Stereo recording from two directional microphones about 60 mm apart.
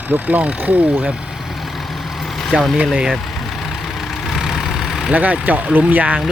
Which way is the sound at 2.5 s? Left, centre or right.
Centre.